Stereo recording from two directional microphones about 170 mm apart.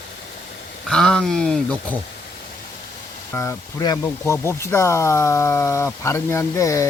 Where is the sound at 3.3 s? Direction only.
15° left (ahead or behind).